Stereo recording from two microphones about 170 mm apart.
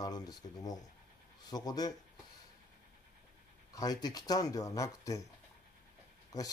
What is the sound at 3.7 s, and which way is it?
Speech, 20° left (ahead or behind).